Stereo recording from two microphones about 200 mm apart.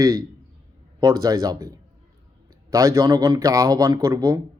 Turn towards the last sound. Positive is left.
turn(degrees=-15)  # may be behind; listen again after turning